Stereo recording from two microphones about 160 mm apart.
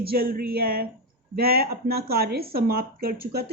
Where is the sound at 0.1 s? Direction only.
70° right (ahead or behind).